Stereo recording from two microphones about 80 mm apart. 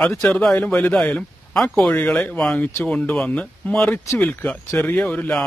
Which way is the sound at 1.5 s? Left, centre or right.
Centre.